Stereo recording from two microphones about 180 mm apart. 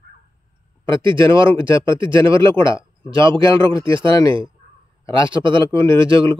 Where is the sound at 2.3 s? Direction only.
15° left (ahead or behind).